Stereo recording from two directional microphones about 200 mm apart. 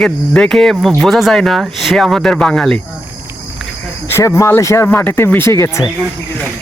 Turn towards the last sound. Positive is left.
turn(degrees=15)  # may be behind; listen again after turning